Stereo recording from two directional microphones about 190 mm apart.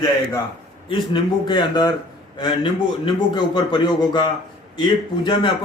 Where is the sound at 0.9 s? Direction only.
25° left (ahead or behind).